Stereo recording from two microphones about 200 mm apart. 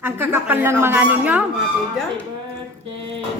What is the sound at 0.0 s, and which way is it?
Music, 10° right (ahead or behind).